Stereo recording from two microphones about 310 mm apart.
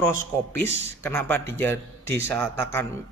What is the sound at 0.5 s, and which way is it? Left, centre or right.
Speech, centre.